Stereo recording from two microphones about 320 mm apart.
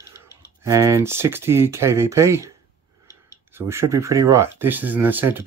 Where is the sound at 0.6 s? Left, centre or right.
Centre.